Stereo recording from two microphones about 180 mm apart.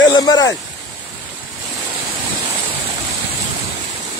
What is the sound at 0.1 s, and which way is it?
Speech, 20° left (ahead or behind).